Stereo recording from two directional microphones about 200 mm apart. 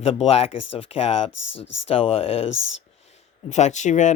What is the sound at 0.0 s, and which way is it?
Speech, 30° left (ahead or behind).